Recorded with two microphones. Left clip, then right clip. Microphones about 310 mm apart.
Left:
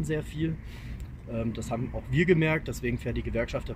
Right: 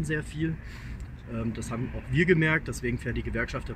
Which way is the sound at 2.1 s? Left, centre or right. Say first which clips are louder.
Right 1 dB; centre.